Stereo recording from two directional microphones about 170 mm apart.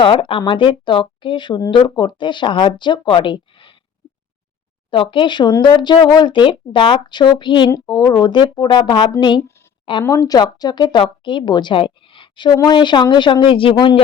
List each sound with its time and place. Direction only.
0.0 s speech: 30° left (ahead or behind)
4.9 s speech: 30° left (ahead or behind)